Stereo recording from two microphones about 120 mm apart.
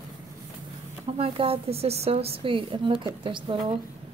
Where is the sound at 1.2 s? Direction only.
50° right (ahead or behind).